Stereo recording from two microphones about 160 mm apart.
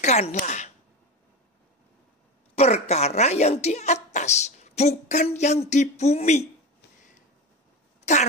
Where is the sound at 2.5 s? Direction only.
40° left (ahead or behind).